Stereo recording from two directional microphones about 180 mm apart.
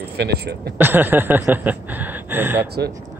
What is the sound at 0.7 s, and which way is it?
Speech, 10° right (ahead or behind).